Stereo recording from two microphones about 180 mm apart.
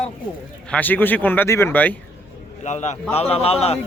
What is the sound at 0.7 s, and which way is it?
Speech, 10° left (ahead or behind).